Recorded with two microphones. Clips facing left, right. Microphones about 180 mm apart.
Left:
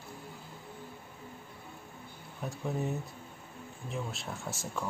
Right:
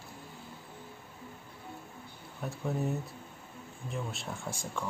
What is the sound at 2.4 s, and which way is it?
Speech, centre (ahead or behind).